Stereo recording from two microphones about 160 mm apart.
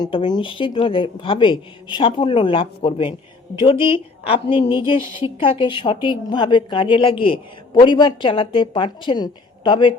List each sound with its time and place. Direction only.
0.0 s a woman's voice: 30° left (ahead or behind)